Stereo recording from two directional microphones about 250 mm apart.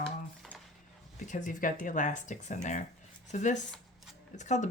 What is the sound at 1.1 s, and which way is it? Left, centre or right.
Speech, left.